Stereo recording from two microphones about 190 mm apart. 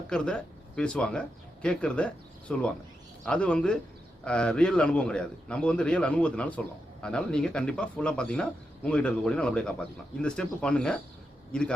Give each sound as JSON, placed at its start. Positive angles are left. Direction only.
{"t": 0.1, "sound": "speech", "side_deg": 5}